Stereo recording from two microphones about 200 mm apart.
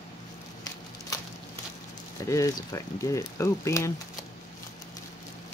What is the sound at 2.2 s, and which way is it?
Speech, 15° left (ahead or behind).